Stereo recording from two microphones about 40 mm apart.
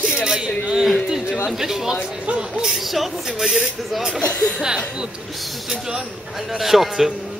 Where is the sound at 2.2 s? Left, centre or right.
Right.